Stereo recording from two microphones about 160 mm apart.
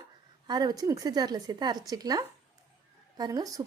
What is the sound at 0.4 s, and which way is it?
A woman's voice, 25° right (ahead or behind).